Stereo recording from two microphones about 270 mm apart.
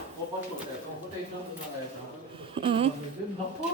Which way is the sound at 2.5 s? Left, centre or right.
Centre.